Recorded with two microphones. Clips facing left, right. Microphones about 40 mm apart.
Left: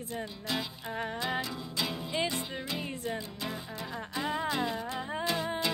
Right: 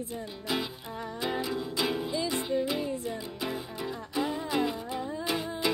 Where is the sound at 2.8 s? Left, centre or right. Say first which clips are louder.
Right 2 dB; left.